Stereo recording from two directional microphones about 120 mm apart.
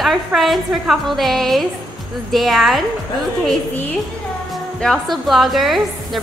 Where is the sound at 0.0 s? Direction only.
Centre (ahead or behind).